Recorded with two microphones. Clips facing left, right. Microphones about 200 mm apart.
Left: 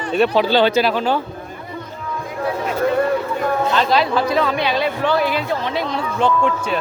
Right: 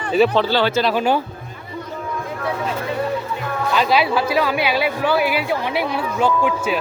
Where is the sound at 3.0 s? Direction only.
50° left (ahead or behind).